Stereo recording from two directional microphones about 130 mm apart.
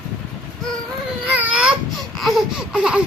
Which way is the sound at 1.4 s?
10° right (ahead or behind).